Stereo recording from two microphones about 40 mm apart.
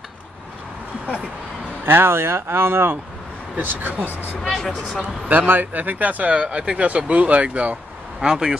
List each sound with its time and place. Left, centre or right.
1.9 s speech: right
3.5 s speech: right
4.1 s speech: left
4.4 s speech: centre
5.5 s speech: right
8.2 s speech: centre